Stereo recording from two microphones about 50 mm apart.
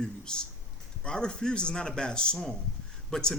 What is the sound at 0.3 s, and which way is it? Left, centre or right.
A man's voice, centre.